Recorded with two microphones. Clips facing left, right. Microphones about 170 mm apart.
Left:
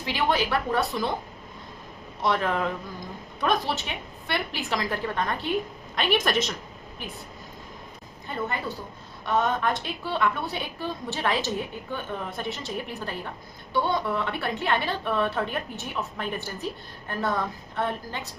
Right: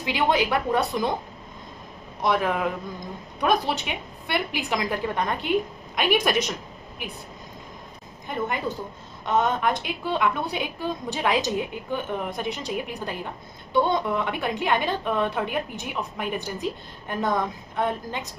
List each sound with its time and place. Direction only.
0.0 s a woman's voice: 15° right (ahead or behind)
2.2 s a woman's voice: 10° right (ahead or behind)
9.2 s a woman's voice: 20° right (ahead or behind)